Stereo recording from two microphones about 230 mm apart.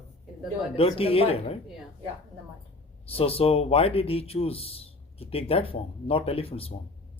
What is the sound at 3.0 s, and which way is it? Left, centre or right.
Speech, left.